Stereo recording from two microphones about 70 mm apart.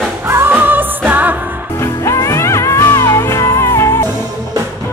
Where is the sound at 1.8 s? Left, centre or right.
Left.